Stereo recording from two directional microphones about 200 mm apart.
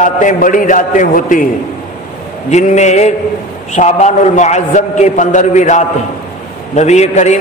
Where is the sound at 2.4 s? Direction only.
35° left (ahead or behind).